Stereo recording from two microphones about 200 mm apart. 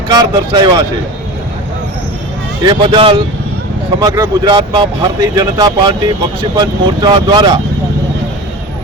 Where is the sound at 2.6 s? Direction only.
25° right (ahead or behind).